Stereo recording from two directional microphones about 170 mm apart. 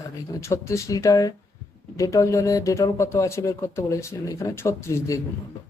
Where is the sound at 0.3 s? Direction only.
15° left (ahead or behind).